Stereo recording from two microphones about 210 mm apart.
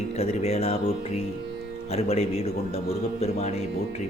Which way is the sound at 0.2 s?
30° left (ahead or behind).